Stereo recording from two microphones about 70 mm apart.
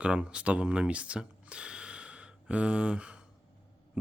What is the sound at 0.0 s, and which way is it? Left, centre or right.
Speech, centre.